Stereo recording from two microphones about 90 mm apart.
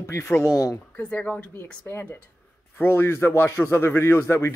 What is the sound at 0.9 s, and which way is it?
Speech, 15° left (ahead or behind).